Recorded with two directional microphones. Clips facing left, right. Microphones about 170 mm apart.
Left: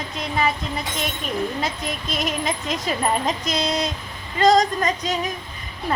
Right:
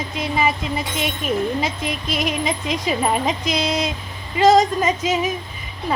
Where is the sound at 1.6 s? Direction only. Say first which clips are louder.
Right 2 dB; centre (ahead or behind).